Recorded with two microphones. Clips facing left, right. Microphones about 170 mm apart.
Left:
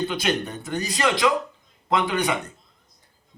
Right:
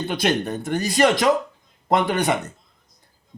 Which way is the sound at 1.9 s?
45° right (ahead or behind).